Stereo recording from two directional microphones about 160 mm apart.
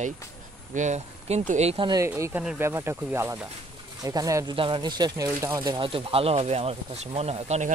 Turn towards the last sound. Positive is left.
turn(degrees=-45)  # may be behind; listen again after turning